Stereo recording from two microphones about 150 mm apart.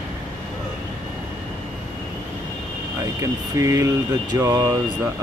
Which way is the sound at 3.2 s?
20° right (ahead or behind).